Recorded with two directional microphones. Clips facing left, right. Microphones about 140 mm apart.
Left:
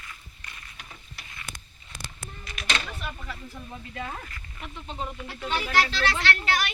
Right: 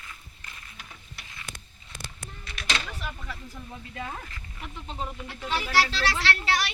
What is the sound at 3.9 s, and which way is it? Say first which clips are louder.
Speech: left 1 dB; 15° right (ahead or behind).